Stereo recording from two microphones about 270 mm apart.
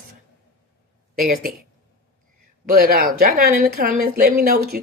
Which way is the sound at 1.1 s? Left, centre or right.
Right.